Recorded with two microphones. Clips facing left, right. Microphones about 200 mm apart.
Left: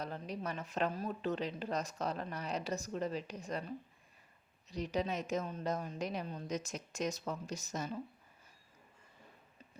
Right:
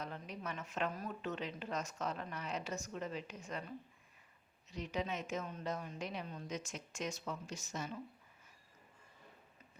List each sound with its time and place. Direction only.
0.0 s speech: 35° left (ahead or behind)
4.7 s speech: 35° left (ahead or behind)